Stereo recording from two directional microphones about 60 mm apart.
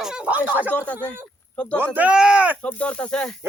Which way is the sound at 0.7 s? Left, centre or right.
Left.